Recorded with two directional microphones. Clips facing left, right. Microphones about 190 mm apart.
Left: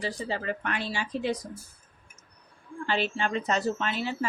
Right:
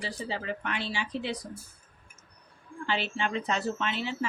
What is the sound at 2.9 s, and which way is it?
A woman's voice, 40° left (ahead or behind).